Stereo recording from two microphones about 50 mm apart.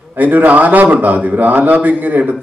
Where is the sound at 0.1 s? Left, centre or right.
Right.